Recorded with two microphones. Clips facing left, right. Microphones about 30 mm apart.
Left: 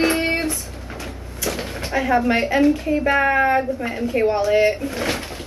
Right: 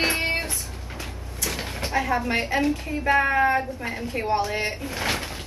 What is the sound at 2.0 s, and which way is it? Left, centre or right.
A woman's voice, centre.